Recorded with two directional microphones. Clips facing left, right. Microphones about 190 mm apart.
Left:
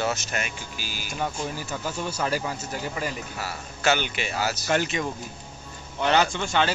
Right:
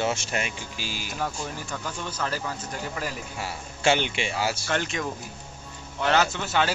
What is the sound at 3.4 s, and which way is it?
Speech, 25° right (ahead or behind).